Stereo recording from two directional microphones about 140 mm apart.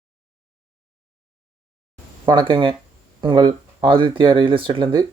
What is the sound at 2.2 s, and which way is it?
Speech, 35° right (ahead or behind).